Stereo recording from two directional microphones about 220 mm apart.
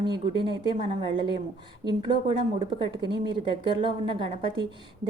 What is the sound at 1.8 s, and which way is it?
A woman's voice, 20° right (ahead or behind).